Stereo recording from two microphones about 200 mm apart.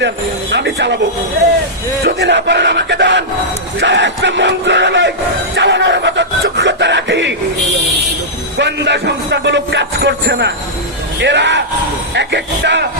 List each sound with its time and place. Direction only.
0.5 s speech: 60° right (ahead or behind)
2.0 s music: 60° right (ahead or behind)
5.5 s a sound: 65° right (ahead or behind)
8.5 s music: 60° right (ahead or behind)